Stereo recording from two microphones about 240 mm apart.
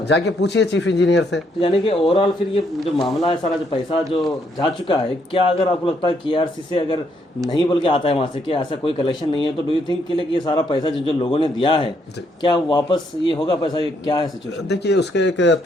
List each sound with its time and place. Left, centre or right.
0.1 s speech: left
1.6 s speech: left
3.0 s a man's voice: centre
3.2 s a man's voice: left
14.7 s speech: left